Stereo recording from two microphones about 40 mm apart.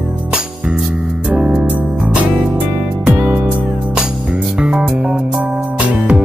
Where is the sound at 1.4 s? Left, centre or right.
Right.